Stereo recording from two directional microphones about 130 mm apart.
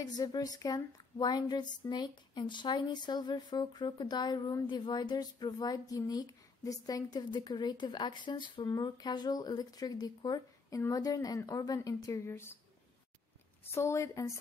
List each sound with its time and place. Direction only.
0.0 s a woman's voice: 30° left (ahead or behind)
13.7 s a woman's voice: 20° left (ahead or behind)